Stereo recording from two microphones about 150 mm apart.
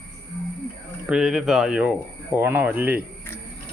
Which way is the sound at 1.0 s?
5° right (ahead or behind).